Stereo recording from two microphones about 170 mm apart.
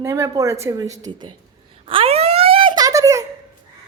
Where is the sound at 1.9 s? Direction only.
35° right (ahead or behind).